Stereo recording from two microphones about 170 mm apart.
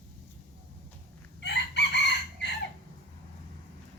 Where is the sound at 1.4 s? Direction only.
85° left.